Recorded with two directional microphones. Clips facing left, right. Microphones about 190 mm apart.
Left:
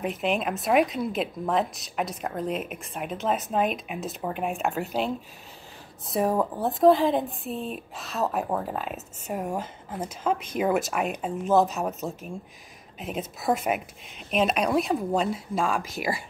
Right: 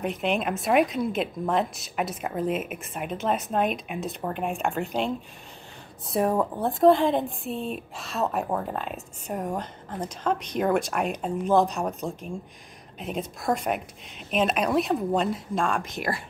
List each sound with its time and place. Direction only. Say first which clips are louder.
0.0 s a woman's voice: even; centre (ahead or behind)